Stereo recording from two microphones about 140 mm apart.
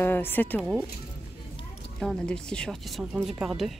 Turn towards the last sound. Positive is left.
turn(degrees=0)  # may be behind; listen again after turning